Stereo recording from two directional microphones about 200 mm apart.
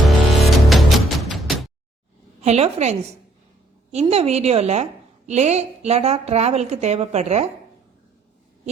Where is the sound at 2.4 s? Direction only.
35° right (ahead or behind).